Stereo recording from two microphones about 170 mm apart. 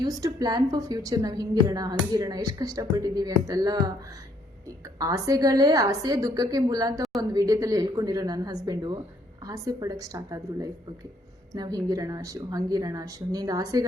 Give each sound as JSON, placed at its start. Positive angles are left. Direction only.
{"t": 0.0, "sound": "speech", "side_deg": -20}
{"t": 4.9, "sound": "speech", "side_deg": -20}